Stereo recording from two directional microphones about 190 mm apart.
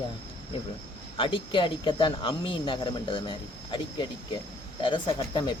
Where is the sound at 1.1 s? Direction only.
25° left (ahead or behind).